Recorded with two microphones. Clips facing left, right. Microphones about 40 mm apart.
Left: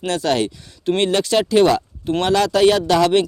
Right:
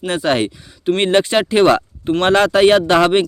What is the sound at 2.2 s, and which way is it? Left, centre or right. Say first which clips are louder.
Speech: right 3 dB; right.